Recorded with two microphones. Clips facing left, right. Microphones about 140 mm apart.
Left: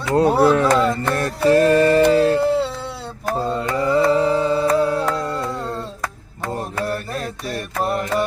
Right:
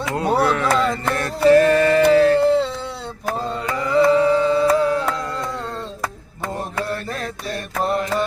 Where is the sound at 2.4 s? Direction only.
5° left (ahead or behind).